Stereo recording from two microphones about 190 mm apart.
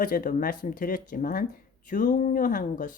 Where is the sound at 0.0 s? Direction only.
50° left (ahead or behind).